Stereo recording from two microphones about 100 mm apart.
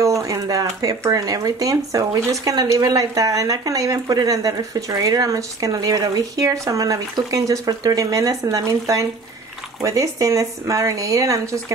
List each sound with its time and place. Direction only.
0.0 s speech: 35° right (ahead or behind)